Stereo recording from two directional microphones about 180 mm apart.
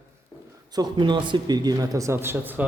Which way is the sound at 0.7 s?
25° right (ahead or behind).